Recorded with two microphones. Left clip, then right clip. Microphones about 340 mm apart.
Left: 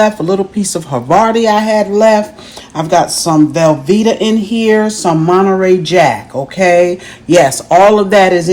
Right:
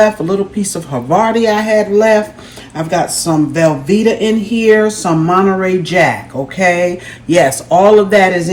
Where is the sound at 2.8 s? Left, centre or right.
Centre.